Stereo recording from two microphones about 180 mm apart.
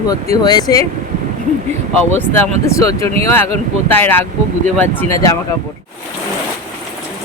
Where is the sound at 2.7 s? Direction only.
15° left (ahead or behind).